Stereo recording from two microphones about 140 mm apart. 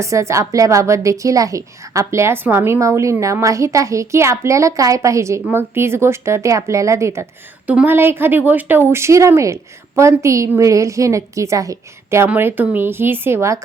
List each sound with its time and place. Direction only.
0.0 s a woman's voice: 20° right (ahead or behind)